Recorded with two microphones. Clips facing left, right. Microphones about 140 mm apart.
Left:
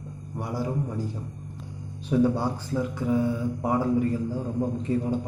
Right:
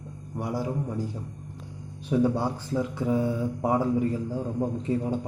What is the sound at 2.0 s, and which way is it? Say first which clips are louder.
Speech: left 1 dB; 15° right (ahead or behind).